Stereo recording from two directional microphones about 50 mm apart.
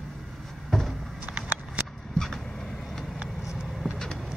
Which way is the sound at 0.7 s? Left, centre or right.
Centre.